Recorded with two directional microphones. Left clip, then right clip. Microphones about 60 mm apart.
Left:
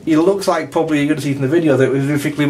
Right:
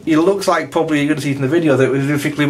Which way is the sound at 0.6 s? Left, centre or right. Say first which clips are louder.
Even; right.